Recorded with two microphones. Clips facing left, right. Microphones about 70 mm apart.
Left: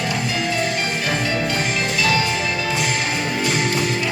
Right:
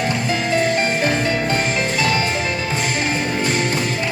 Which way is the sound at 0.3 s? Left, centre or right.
Right.